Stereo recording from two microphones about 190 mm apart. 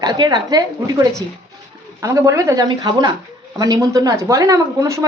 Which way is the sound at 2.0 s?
15° right (ahead or behind).